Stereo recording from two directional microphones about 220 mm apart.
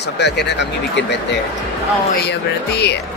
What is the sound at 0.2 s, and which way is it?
Speech, 50° left (ahead or behind).